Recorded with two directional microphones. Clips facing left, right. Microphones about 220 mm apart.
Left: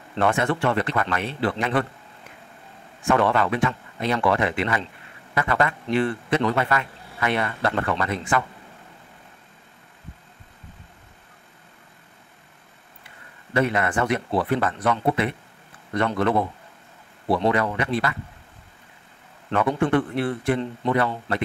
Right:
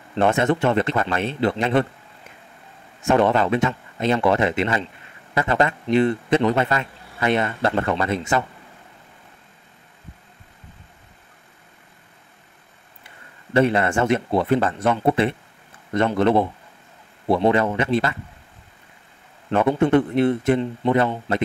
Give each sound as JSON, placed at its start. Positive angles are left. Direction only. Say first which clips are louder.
{"t": 0.2, "sound": "a man's voice", "louder": "right 3 dB", "side_deg": -25}
{"t": 3.0, "sound": "a man's voice", "louder": "right 3 dB", "side_deg": -25}
{"t": 13.5, "sound": "a man's voice", "louder": "right 4 dB", "side_deg": -30}
{"t": 17.5, "sound": "a man's voice", "louder": "right 5 dB", "side_deg": -25}
{"t": 19.8, "sound": "a man's voice", "louder": "right 5 dB", "side_deg": -20}